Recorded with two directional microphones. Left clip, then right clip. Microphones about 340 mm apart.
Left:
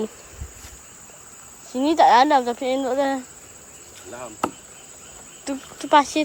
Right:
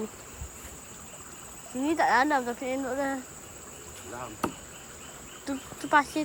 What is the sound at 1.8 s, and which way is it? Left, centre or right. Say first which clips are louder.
Speech: left 9 dB; centre.